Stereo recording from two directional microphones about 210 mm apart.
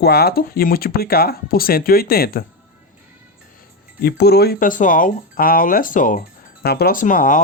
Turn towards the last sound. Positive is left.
turn(degrees=40)  # may be behind; listen again after turning